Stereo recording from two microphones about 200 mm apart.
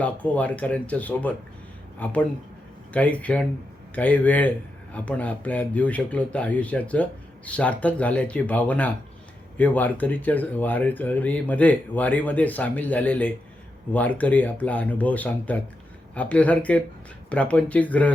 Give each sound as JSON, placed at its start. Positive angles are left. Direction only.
{"t": 0.0, "sound": "speech", "side_deg": 5}